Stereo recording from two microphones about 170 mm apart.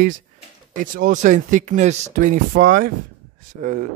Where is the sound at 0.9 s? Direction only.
50° right (ahead or behind).